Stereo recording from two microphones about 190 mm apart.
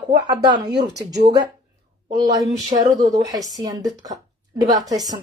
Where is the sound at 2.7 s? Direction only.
20° right (ahead or behind).